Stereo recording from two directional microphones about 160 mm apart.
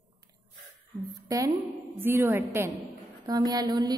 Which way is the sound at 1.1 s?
20° right (ahead or behind).